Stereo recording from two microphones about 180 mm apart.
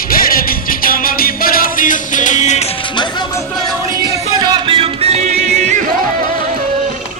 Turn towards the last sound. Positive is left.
turn(degrees=-40)  # may be behind; listen again after turning